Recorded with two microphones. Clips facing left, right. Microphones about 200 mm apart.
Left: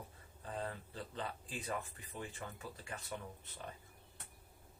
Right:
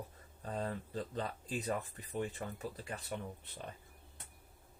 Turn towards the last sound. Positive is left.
turn(degrees=-35)  # may be behind; listen again after turning